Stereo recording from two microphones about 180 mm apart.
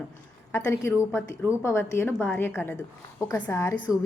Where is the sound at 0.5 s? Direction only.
15° left (ahead or behind).